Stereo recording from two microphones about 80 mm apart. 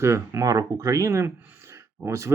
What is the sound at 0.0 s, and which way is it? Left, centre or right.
Speech, right.